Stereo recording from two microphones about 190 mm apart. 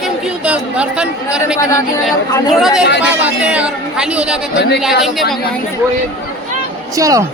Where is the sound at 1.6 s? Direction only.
15° left (ahead or behind).